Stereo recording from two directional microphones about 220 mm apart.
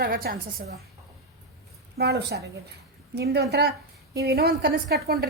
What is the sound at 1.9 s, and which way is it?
A woman's voice, 45° right (ahead or behind).